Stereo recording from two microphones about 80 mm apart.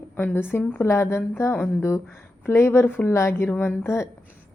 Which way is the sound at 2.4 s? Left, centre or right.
Left.